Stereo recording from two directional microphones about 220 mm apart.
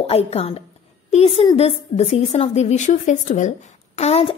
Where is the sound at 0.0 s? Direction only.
25° left (ahead or behind).